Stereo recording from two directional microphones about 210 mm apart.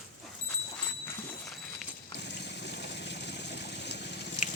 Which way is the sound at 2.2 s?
55° left (ahead or behind).